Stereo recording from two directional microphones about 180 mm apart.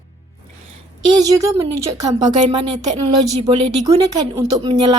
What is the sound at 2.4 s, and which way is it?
A woman's voice, 25° right (ahead or behind).